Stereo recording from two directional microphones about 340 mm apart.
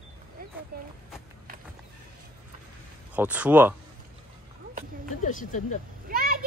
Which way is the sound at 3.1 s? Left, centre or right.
Centre.